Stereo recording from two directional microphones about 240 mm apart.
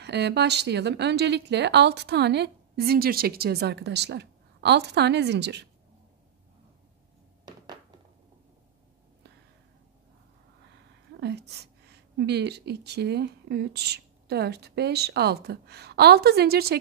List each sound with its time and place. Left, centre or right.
0.0 s a woman's voice: right
7.4 s thunk: centre
11.1 s a woman's voice: right